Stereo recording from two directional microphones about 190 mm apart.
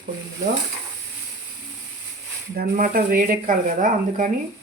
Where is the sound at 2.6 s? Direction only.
50° right (ahead or behind).